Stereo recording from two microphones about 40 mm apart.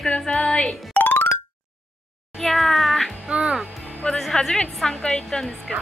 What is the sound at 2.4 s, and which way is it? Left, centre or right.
Cat, centre.